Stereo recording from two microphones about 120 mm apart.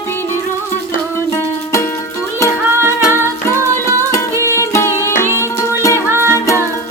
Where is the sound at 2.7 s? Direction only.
20° right (ahead or behind).